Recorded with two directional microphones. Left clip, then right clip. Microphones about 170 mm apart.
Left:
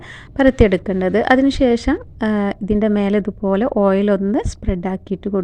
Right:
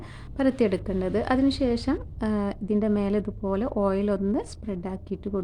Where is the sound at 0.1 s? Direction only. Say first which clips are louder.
Left 11 dB; 35° left (ahead or behind).